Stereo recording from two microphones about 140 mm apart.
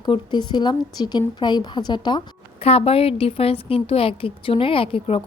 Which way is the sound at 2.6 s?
45° left (ahead or behind).